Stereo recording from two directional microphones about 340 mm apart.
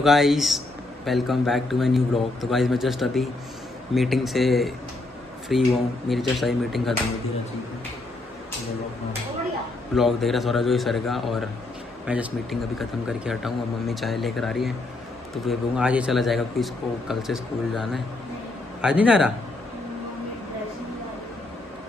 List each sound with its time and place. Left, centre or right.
0.0 s a man's voice: centre
9.9 s a man's voice: centre